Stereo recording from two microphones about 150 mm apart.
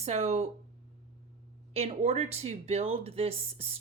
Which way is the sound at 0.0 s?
45° right (ahead or behind).